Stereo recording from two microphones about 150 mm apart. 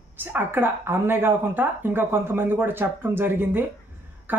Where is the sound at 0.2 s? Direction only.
15° right (ahead or behind).